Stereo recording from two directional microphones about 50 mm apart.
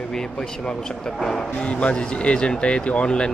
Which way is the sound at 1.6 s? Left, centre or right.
Left.